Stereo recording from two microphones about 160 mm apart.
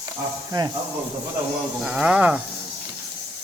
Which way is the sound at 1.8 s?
5° right (ahead or behind).